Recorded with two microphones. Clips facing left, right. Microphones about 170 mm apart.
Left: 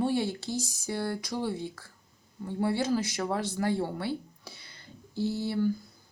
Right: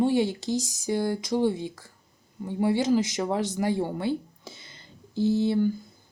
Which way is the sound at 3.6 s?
15° right (ahead or behind).